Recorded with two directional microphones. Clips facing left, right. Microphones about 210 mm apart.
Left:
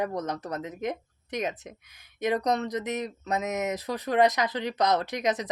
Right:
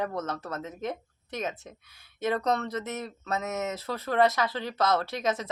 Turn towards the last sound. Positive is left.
turn(degrees=15)  # may be behind; listen again after turning